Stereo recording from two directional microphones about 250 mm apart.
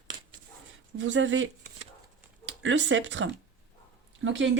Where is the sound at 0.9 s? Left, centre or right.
Right.